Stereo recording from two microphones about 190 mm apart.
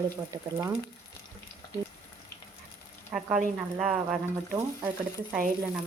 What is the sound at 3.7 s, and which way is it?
Speech, 5° right (ahead or behind).